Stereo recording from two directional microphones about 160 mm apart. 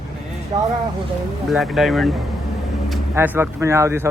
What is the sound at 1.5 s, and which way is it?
Speech, centre (ahead or behind).